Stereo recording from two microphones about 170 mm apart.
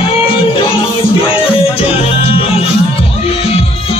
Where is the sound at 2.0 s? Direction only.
35° left (ahead or behind).